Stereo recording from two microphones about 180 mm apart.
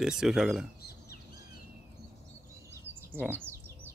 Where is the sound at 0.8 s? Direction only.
60° left (ahead or behind).